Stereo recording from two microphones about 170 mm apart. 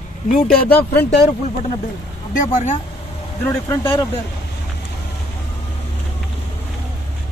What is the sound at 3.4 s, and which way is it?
Speech, 15° left (ahead or behind).